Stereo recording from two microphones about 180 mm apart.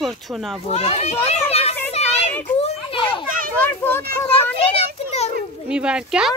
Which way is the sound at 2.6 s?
35° left (ahead or behind).